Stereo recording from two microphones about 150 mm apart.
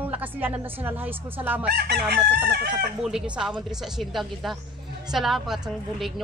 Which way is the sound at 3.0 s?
5° right (ahead or behind).